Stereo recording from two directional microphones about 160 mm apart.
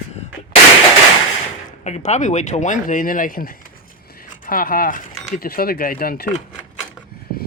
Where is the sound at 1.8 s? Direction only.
50° left (ahead or behind); by 6.3 s 65° left (ahead or behind).